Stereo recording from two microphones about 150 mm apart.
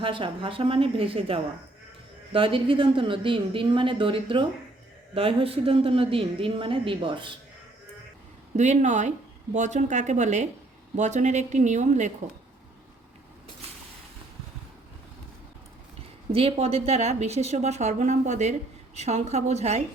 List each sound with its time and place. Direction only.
0.0 s speech: 35° right (ahead or behind)
8.5 s a woman's voice: 55° right (ahead or behind)
16.3 s a woman's voice: 40° right (ahead or behind)